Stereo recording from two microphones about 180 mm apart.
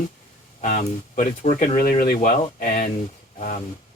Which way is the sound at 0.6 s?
50° left (ahead or behind).